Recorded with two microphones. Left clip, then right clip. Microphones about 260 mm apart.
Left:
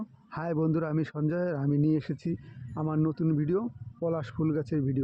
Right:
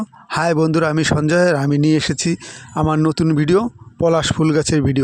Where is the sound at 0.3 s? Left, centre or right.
Right.